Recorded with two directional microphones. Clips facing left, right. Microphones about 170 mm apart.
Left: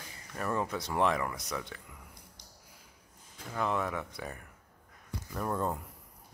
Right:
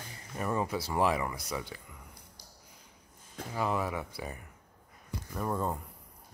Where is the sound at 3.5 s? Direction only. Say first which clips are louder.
Even; 5° right (ahead or behind).